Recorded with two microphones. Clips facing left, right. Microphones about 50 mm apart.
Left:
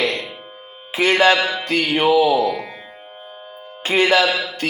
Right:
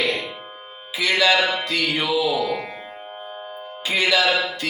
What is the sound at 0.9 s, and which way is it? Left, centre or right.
Speech, left.